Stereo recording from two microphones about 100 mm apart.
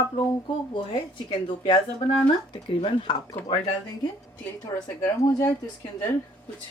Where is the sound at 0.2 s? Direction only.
50° left (ahead or behind).